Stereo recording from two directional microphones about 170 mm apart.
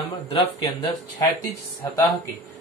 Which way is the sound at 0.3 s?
35° left (ahead or behind).